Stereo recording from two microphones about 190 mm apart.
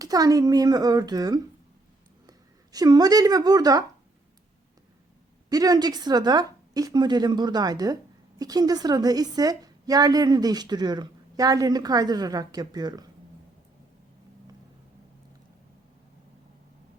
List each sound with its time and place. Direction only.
0.0 s a woman's voice: 20° right (ahead or behind)
2.7 s a woman's voice: 20° right (ahead or behind)
5.5 s a woman's voice: 20° right (ahead or behind)